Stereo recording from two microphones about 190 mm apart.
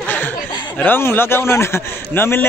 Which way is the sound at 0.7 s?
10° left (ahead or behind).